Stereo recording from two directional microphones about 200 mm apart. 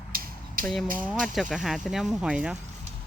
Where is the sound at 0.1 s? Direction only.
45° right (ahead or behind).